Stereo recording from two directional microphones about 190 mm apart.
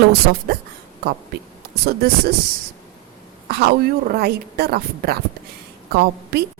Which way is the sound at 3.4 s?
55° right (ahead or behind).